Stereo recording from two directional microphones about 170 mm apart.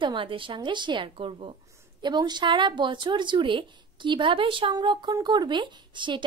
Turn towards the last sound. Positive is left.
turn(degrees=-30)  # may be behind; listen again after turning